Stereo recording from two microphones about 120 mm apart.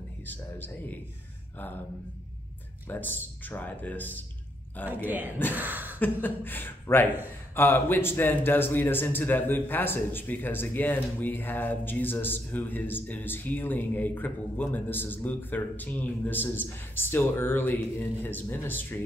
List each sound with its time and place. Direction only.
0.3 s a man's voice: 15° left (ahead or behind)
2.9 s a man's voice: 15° left (ahead or behind)
5.0 s speech: 15° right (ahead or behind)
5.5 s a sound: 15° right (ahead or behind)
6.2 s a man's voice: 15° left (ahead or behind)